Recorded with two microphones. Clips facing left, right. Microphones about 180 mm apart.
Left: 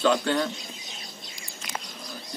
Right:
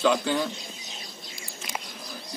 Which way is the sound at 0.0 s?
5° right (ahead or behind).